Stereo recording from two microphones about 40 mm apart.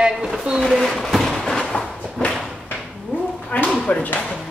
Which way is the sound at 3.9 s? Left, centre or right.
Left.